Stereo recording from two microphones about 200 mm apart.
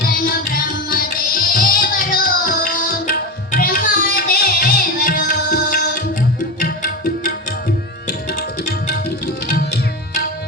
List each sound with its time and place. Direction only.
0.9 s music: 45° left (ahead or behind)
8.0 s tabla: 50° left (ahead or behind)
8.9 s music: 50° left (ahead or behind)